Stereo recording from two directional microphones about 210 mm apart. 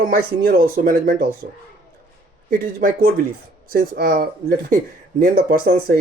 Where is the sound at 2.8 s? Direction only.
45° right (ahead or behind).